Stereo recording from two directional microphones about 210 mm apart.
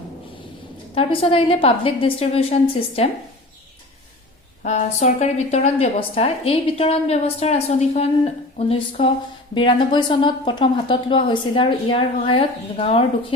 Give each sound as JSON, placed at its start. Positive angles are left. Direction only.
{"t": 0.9, "sound": "a woman's voice", "side_deg": 25}
{"t": 4.6, "sound": "a woman's voice", "side_deg": 35}